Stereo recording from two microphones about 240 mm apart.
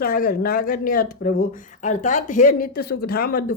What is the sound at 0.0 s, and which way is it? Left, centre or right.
Speech, left.